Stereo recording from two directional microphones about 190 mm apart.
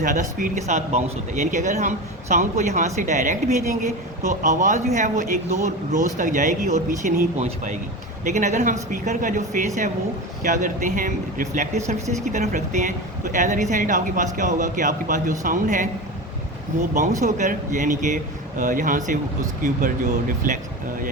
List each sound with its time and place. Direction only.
0.0 s a man's voice: 45° right (ahead or behind)
17.2 s a man's voice: 40° right (ahead or behind)